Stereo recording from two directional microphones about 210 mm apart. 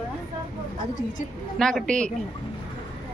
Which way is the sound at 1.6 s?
5° left (ahead or behind).